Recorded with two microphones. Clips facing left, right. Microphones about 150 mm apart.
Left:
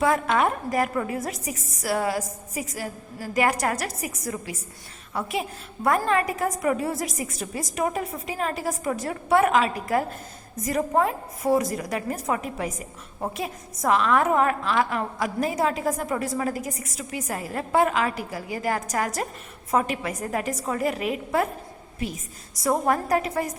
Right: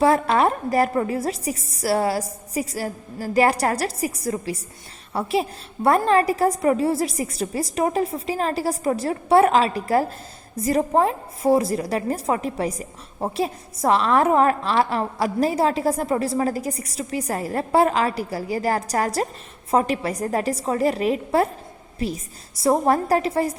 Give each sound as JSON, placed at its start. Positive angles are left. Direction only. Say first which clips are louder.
{"t": 0.0, "sound": "a woman's voice", "louder": "right 4 dB", "side_deg": -35}